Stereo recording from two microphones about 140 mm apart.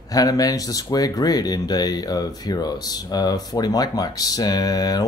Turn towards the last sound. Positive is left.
turn(degrees=25)  # may be behind; listen again after turning